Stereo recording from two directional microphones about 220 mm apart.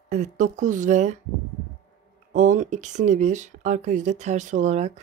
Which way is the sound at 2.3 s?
35° right (ahead or behind).